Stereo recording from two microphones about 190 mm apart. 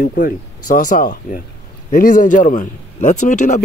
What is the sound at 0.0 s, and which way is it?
A man's voice, 45° left (ahead or behind).